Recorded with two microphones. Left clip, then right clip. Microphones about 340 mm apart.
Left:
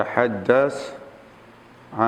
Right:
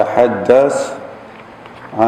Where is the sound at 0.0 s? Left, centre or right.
Left.